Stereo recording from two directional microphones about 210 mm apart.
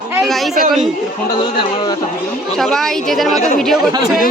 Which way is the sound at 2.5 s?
Centre (ahead or behind).